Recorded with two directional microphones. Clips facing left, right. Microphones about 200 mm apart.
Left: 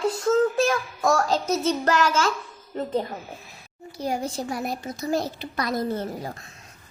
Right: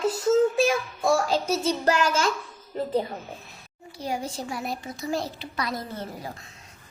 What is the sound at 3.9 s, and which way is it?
A child's voice, 45° left (ahead or behind).